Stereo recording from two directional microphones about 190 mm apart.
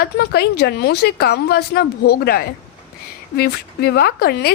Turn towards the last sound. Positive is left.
turn(degrees=55)  # may be behind; listen again after turning